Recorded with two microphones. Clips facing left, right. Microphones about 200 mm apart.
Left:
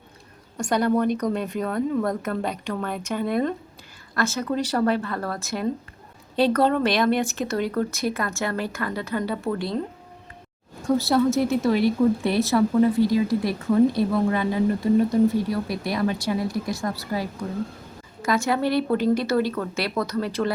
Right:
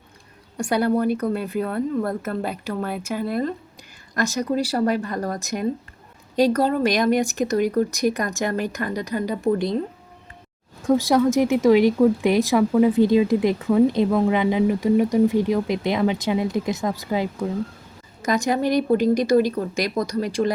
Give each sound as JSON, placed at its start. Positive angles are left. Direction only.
{"t": 0.5, "sound": "a woman's voice", "side_deg": -10}
{"t": 4.1, "sound": "a woman's voice", "side_deg": -15}
{"t": 10.8, "sound": "a woman's voice", "side_deg": -15}